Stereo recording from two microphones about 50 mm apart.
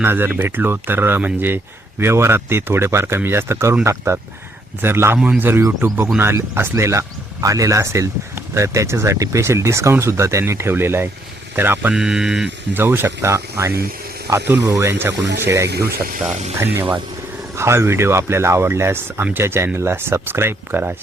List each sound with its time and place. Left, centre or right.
0.0 s a man's voice: right
4.8 s a man's voice: right
7.4 s a man's voice: right
11.9 s speech: centre
12.7 s speech: right
13.2 s speech: right
14.4 s speech: right
14.7 s a man's voice: right
17.6 s a man's voice: right